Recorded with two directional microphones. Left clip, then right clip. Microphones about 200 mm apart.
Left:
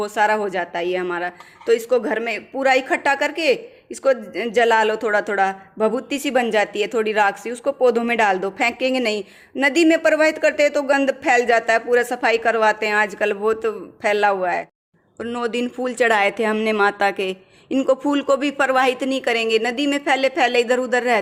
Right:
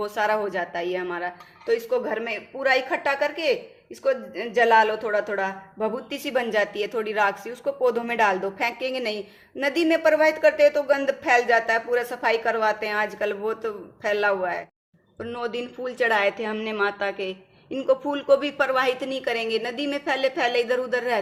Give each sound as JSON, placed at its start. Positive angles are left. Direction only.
{"t": 0.0, "sound": "speech", "side_deg": 40}